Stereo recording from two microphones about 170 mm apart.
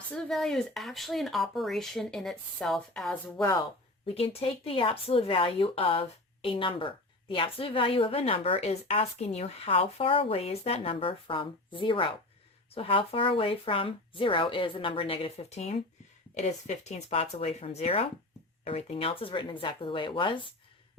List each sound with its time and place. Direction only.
0.1 s speech: centre (ahead or behind)
4.0 s speech: 35° left (ahead or behind)